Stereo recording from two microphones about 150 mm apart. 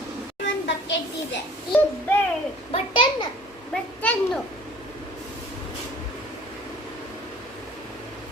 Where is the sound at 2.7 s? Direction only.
35° left (ahead or behind).